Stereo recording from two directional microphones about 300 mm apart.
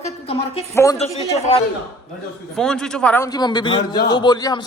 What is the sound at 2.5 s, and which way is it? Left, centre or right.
A man's voice, centre.